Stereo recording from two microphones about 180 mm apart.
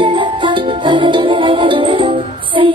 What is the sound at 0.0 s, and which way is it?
Music, 25° right (ahead or behind).